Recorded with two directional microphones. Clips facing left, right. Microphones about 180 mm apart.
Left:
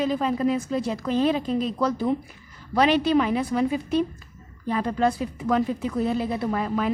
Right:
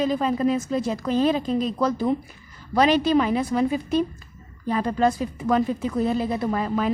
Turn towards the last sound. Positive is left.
turn(degrees=-35)  # may be behind; listen again after turning